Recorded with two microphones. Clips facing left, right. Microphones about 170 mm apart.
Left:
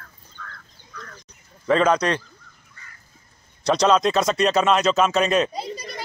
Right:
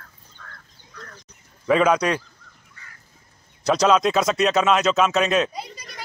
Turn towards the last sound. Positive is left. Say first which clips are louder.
# left 5 dB
turn(degrees=35)  # may be behind; listen again after turning